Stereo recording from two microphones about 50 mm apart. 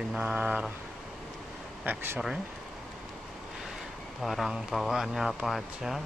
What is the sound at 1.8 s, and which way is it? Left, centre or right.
Speech, right.